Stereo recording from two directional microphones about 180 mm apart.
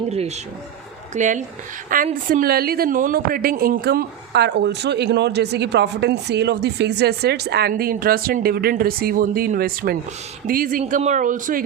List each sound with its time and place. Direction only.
0.1 s speech: 35° right (ahead or behind)